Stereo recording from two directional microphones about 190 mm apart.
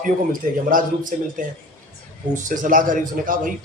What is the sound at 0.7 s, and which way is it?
Speech, 45° right (ahead or behind).